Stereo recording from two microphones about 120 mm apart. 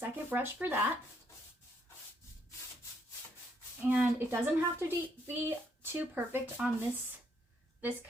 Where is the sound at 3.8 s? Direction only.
15° right (ahead or behind).